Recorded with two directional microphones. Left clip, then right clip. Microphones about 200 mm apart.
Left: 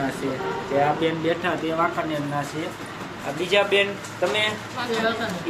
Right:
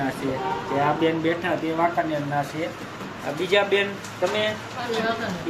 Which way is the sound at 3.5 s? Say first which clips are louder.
Left 1 dB; 20° right (ahead or behind).